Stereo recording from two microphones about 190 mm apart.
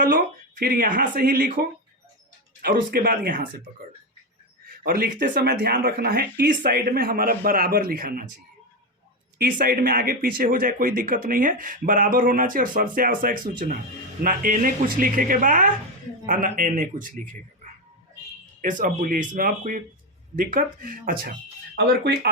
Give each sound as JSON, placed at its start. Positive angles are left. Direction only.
{"t": 0.0, "sound": "speech", "side_deg": -50}
{"t": 4.8, "sound": "speech", "side_deg": -50}
{"t": 9.4, "sound": "speech", "side_deg": -50}
{"t": 18.6, "sound": "speech", "side_deg": -45}
{"t": 21.8, "sound": "speech", "side_deg": -55}